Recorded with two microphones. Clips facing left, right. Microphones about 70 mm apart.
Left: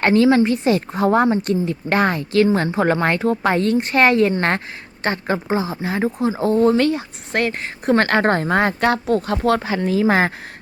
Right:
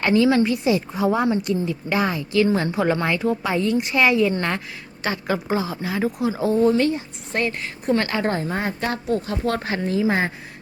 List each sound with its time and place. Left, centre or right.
0.0 s speech: left
5.0 s speech: left
5.5 s speech: left
6.4 s speech: left
6.7 s speech: left
7.6 s a woman's voice: left